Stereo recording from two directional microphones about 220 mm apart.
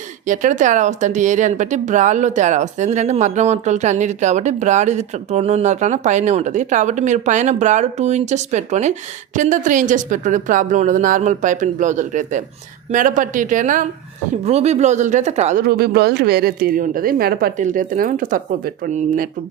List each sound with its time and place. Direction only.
0.3 s speech: 35° right (ahead or behind)
15.6 s speech: 45° right (ahead or behind)